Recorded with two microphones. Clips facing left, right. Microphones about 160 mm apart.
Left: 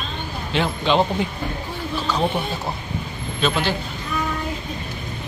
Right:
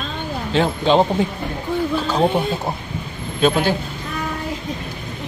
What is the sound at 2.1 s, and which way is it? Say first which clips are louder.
Speech: right 3 dB; 30° right (ahead or behind).